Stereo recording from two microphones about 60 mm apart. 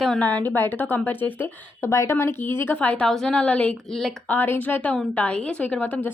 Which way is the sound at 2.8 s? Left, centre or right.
Left.